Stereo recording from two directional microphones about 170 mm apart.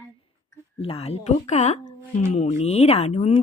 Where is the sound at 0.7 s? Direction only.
35° left (ahead or behind).